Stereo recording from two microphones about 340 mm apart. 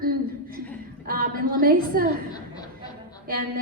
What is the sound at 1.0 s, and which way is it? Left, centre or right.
A woman's voice, right.